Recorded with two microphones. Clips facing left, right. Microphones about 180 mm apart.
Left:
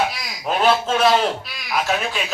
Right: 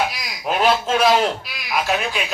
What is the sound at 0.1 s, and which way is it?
A man's voice, centre (ahead or behind).